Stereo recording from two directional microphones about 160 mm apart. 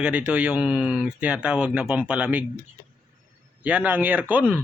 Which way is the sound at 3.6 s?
10° right (ahead or behind).